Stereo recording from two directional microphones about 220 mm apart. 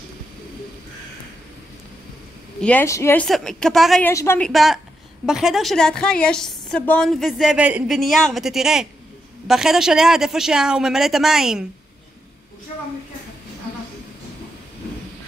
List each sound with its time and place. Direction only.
2.6 s a woman's voice: 10° left (ahead or behind)
4.1 s a woman's voice: 10° left (ahead or behind)
4.5 s a woman's voice: centre (ahead or behind)